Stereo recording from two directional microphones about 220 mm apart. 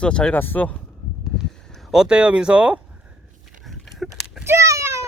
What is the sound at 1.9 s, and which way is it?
Speech, 5° right (ahead or behind).